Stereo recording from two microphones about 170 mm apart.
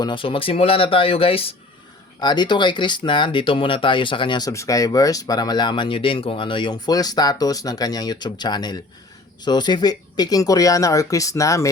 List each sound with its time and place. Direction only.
0.0 s speech: 30° left (ahead or behind)